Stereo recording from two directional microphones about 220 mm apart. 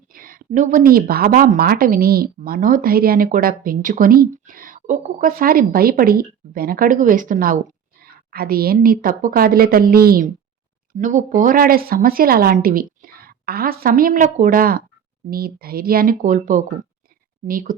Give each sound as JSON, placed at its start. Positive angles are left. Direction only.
{"t": 0.1, "sound": "speech", "side_deg": -40}